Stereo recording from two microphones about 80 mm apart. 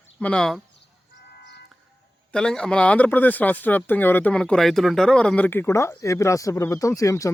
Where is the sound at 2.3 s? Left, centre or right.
Centre; by 4.3 s left.